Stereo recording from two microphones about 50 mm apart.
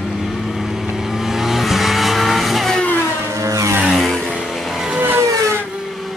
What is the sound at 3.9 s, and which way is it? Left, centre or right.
Vehicle, centre.